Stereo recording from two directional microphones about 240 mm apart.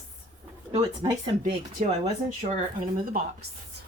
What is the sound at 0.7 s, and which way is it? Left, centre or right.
Speech, centre.